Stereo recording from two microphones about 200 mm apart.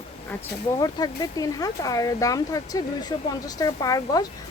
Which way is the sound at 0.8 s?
20° left (ahead or behind).